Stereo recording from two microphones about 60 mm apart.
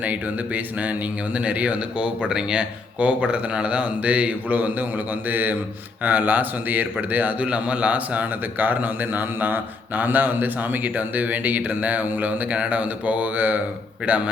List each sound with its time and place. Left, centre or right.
0.0 s a man's voice: right